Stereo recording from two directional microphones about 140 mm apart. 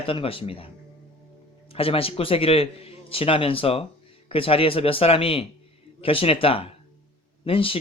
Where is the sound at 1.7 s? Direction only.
40° left (ahead or behind).